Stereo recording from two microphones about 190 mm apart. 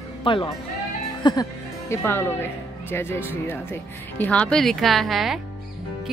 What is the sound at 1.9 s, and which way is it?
A woman's voice, 10° left (ahead or behind).